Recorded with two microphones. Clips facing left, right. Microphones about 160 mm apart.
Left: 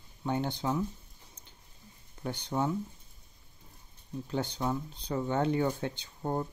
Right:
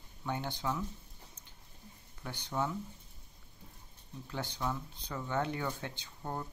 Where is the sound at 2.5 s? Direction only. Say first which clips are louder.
Left 4 dB; 25° left (ahead or behind).